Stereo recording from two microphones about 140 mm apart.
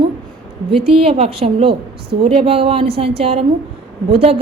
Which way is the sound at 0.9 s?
45° right (ahead or behind).